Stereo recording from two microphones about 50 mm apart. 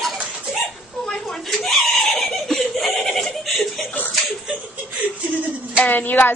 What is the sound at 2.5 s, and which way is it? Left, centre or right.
Goat, centre.